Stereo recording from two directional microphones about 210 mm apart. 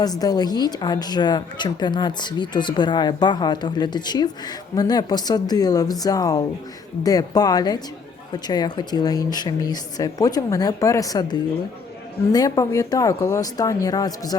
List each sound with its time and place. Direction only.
0.0 s a woman's voice: 20° left (ahead or behind)